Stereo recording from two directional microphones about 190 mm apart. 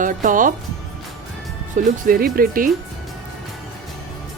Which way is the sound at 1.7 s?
45° right (ahead or behind).